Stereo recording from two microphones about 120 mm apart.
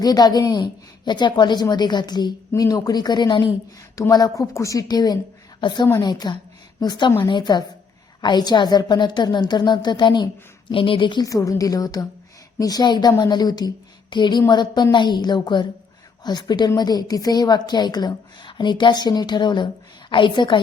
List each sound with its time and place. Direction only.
0.0 s a woman's voice: 35° left (ahead or behind)
11.3 s a woman's voice: 25° left (ahead or behind)